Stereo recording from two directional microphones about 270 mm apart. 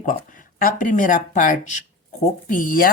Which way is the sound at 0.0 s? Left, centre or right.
Left.